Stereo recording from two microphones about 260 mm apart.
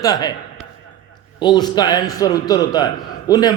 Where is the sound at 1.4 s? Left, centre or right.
Centre.